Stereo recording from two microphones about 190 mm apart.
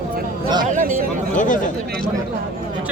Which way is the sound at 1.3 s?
45° left (ahead or behind).